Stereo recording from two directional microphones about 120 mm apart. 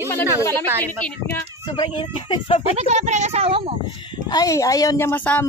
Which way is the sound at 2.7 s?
70° right (ahead or behind).